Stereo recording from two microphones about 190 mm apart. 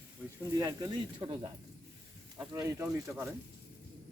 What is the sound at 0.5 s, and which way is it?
Speech, 20° right (ahead or behind).